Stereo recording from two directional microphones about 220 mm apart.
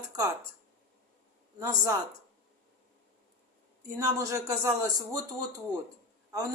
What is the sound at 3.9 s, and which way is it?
Speech, 15° right (ahead or behind).